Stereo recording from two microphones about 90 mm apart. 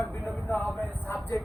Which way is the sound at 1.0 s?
20° left (ahead or behind).